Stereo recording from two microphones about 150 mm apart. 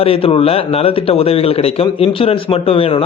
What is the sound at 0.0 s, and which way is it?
Speech, 40° left (ahead or behind).